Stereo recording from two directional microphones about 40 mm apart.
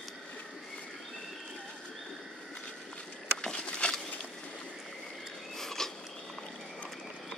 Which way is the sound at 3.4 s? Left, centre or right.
Left.